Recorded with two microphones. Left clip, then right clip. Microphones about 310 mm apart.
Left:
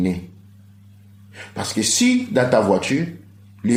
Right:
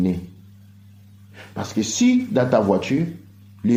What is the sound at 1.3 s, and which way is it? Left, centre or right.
Speech, centre.